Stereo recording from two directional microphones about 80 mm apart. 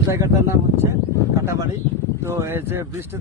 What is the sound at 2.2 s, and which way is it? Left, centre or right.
Speech, right.